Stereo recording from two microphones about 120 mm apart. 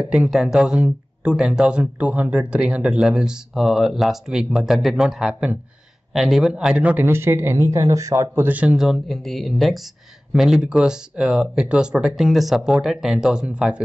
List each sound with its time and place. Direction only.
0.1 s speech: 5° right (ahead or behind)